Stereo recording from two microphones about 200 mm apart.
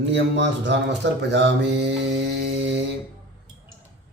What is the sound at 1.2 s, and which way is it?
Mantra, 60° right (ahead or behind).